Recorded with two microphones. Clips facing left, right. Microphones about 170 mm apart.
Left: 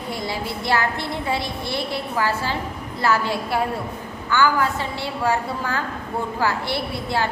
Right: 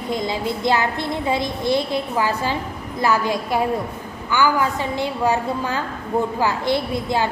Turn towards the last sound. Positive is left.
turn(degrees=-15)  # may be behind; listen again after turning